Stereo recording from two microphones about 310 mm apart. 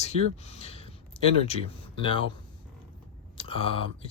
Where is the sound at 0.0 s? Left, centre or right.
Left.